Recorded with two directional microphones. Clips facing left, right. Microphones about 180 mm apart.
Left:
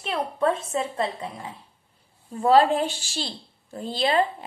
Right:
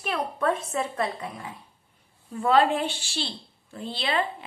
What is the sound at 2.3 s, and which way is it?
A woman's voice, 35° left (ahead or behind).